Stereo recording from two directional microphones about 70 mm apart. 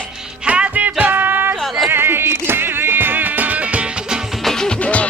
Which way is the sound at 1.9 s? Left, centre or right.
Right.